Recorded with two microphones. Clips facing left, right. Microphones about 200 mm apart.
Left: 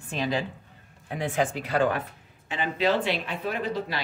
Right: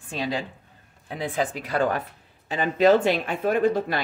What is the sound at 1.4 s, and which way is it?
Speech, 40° right (ahead or behind).